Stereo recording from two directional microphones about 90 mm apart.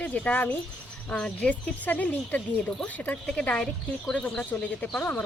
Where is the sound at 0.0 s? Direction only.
15° left (ahead or behind).